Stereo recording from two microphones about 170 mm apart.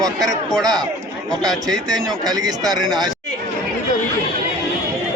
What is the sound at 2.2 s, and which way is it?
Speech, 25° right (ahead or behind).